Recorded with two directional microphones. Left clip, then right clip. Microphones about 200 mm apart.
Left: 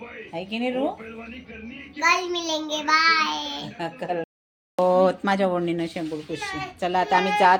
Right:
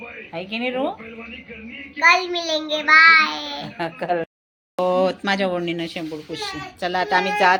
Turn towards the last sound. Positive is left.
turn(degrees=5)  # may be behind; listen again after turning